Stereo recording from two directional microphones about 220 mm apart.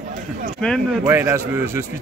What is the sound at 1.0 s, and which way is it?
Speech, 10° right (ahead or behind).